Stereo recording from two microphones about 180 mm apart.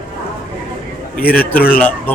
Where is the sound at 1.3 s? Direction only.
55° left (ahead or behind).